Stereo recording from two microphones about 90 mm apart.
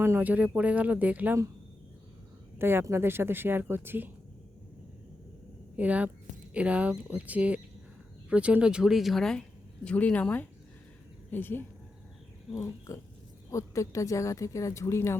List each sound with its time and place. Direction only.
0.0 s speech: 25° right (ahead or behind)
2.6 s speech: 25° right (ahead or behind)
5.7 s speech: 15° right (ahead or behind); by 9.4 s 5° left (ahead or behind)
9.8 s speech: 15° left (ahead or behind)
12.5 s speech: 35° left (ahead or behind)